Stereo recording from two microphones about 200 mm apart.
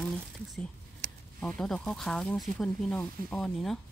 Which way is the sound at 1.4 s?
5° left (ahead or behind).